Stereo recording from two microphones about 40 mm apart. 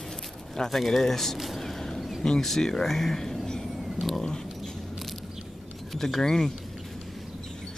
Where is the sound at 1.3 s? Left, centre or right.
Centre.